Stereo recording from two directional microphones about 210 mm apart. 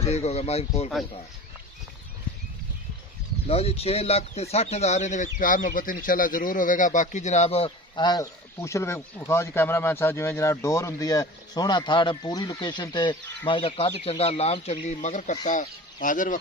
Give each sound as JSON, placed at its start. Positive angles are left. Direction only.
{"t": 0.0, "sound": "speech", "side_deg": 30}
{"t": 3.4, "sound": "speech", "side_deg": 30}